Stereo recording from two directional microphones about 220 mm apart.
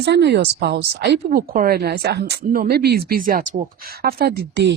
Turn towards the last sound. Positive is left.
turn(degrees=-50)  # may be behind; listen again after turning